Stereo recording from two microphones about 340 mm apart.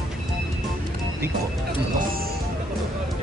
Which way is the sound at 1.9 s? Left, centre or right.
Right.